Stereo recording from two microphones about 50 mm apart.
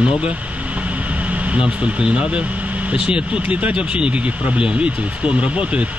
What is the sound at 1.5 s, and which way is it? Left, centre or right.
Speech, centre.